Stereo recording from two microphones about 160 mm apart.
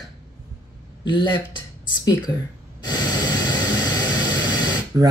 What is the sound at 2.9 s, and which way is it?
Vehicle, 25° left (ahead or behind).